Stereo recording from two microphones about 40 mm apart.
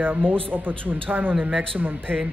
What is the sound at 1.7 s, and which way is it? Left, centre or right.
Speech, right.